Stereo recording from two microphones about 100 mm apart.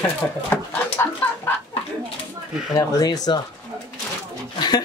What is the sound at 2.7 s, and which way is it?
Speech, 40° left (ahead or behind).